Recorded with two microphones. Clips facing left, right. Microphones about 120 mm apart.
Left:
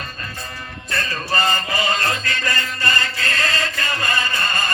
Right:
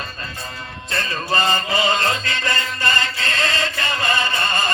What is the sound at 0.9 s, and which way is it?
Music, 20° right (ahead or behind).